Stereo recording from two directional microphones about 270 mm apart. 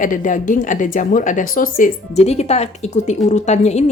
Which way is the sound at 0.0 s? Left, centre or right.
Left.